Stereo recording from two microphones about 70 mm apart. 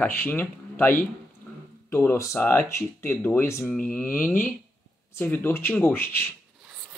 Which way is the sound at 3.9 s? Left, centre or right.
Left.